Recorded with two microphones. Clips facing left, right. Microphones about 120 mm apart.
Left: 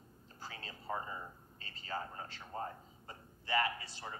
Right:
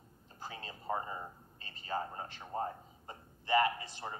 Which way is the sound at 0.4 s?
20° right (ahead or behind).